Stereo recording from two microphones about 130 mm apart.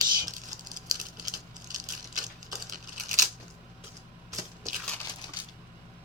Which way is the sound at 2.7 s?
90° right.